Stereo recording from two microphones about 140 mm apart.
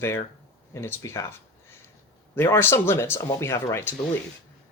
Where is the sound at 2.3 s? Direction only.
15° left (ahead or behind).